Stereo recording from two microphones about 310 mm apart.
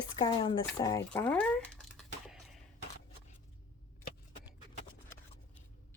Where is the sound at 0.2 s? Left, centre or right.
Centre.